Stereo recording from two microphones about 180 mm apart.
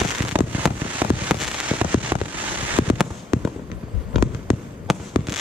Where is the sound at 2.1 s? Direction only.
15° right (ahead or behind).